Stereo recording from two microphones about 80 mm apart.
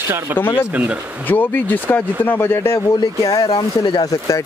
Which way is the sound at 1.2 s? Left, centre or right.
Left.